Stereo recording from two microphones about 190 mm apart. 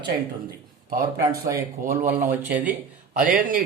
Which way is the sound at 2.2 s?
10° right (ahead or behind).